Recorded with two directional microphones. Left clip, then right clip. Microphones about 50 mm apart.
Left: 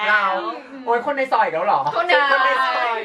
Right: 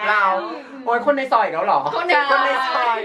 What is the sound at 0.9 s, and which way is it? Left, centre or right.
Speech, right.